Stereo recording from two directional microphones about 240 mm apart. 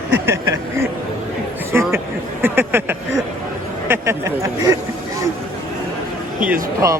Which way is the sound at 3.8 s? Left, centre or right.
Centre.